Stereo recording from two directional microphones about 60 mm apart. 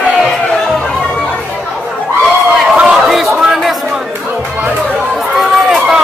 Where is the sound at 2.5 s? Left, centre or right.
Centre.